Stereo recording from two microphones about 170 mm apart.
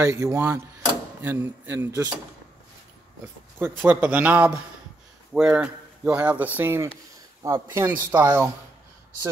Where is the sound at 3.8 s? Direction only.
10° right (ahead or behind).